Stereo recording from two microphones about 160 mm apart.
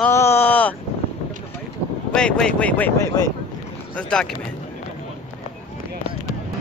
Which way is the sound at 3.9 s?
5° left (ahead or behind).